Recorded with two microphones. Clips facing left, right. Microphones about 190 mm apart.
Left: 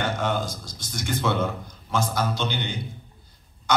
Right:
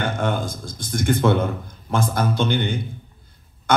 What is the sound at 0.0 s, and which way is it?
Speech, 55° right (ahead or behind).